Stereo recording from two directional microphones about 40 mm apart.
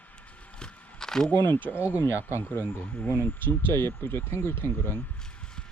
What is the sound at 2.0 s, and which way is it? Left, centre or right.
Speech, left.